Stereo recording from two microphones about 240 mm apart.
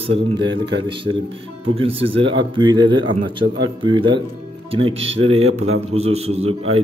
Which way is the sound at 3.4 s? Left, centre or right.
Right.